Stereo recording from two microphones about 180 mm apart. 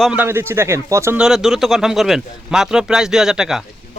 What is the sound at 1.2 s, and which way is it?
Speech, centre (ahead or behind).